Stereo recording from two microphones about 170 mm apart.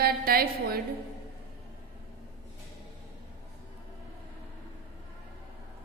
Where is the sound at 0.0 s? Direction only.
65° right (ahead or behind).